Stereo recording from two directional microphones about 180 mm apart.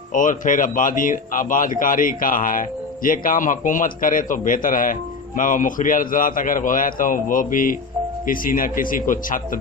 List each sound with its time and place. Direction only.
0.1 s a man's voice: 45° left (ahead or behind)